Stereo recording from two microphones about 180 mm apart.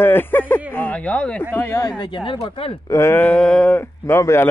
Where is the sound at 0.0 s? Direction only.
10° left (ahead or behind); by 2.7 s 30° left (ahead or behind).